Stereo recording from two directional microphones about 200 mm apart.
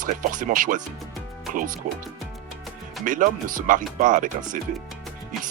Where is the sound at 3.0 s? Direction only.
40° right (ahead or behind).